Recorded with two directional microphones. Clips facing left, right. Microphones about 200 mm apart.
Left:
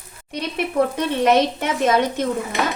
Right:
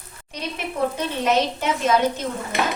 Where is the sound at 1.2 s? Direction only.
55° left (ahead or behind).